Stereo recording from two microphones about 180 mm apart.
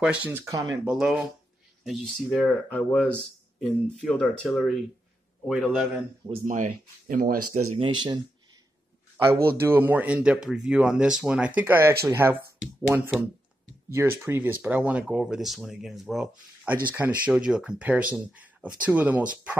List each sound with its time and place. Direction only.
0.0 s speech: 5° right (ahead or behind)
0.8 s speech: 5° right (ahead or behind)
6.4 s speech: 45° right (ahead or behind)
7.7 s speech: 25° right (ahead or behind)
9.1 s speech: 15° right (ahead or behind)